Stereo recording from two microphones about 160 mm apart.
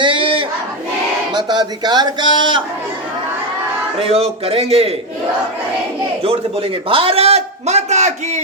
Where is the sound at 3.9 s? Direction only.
40° right (ahead or behind).